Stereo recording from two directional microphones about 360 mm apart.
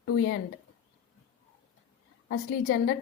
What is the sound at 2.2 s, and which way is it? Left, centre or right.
Speech, left.